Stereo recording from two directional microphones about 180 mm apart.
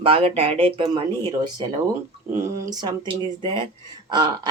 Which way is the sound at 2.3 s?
15° right (ahead or behind).